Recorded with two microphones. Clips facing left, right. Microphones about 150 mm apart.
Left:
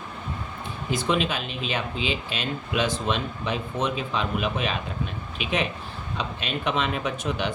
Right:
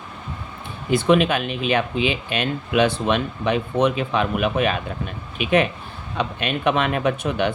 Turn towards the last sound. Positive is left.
turn(degrees=-60)  # may be behind; listen again after turning